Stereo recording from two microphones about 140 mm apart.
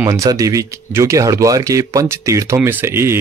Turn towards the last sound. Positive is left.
turn(degrees=-20)  # may be behind; listen again after turning